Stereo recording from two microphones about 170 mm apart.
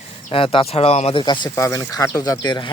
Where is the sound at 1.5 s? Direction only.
15° left (ahead or behind).